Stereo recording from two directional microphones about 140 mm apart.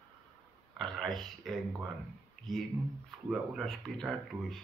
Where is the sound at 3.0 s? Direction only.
5° right (ahead or behind).